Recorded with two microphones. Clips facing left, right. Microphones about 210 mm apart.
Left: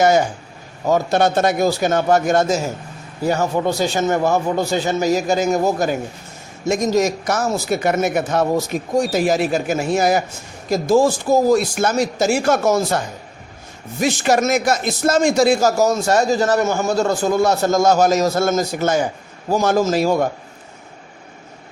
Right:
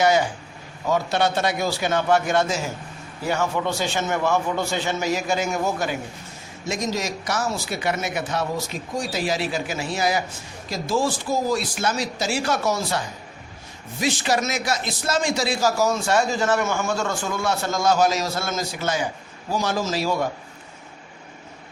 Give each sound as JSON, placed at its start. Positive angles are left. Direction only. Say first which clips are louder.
{"t": 0.0, "sound": "a man's voice", "louder": "left 4 dB", "side_deg": 45}